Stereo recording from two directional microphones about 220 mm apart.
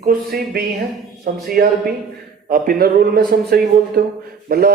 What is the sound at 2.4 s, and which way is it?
Speech, 40° right (ahead or behind).